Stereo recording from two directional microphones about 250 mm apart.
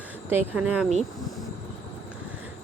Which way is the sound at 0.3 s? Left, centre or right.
Centre.